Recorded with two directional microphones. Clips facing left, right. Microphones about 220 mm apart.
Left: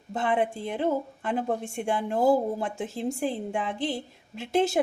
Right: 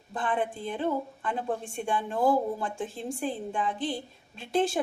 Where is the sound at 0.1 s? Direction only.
25° left (ahead or behind).